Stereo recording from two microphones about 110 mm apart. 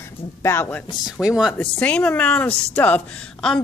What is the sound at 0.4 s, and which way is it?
Speech, 25° left (ahead or behind).